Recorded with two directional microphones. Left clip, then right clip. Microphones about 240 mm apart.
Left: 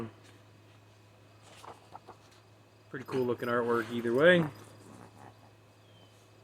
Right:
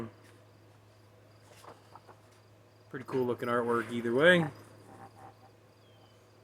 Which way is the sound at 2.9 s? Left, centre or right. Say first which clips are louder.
Even; centre.